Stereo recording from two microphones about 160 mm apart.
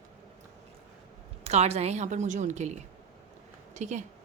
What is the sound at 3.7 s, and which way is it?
Speech, 50° right (ahead or behind).